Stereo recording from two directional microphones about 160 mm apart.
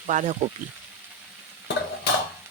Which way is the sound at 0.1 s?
50° right (ahead or behind).